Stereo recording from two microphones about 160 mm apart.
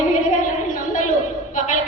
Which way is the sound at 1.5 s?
55° left (ahead or behind).